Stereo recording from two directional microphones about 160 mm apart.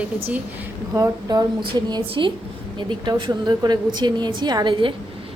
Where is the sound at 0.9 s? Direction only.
20° right (ahead or behind).